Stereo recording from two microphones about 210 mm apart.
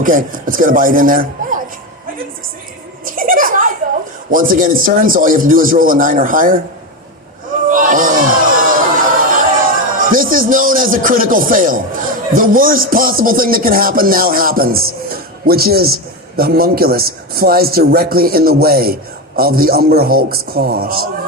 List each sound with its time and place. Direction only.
0.0 s speech: 40° right (ahead or behind)
3.0 s children playing: 40° right (ahead or behind)
4.3 s speech: 40° right (ahead or behind)
7.7 s a sound: 40° right (ahead or behind)
12.3 s speech: 40° right (ahead or behind)